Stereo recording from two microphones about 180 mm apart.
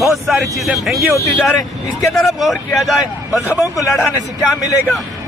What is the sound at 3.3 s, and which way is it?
Speech, 20° left (ahead or behind).